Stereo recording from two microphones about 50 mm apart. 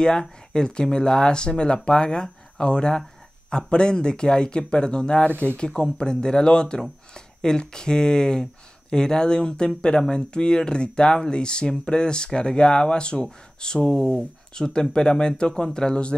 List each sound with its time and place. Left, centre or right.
0.0 s speech: centre